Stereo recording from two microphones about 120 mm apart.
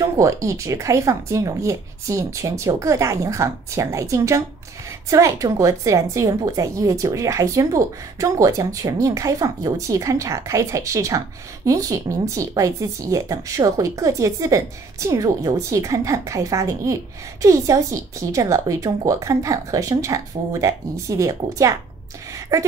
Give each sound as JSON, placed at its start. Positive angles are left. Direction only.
{"t": 0.0, "sound": "a woman's voice", "side_deg": -25}